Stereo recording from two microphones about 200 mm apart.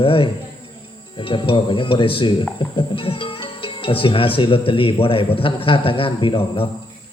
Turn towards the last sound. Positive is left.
turn(degrees=30)  # may be behind; listen again after turning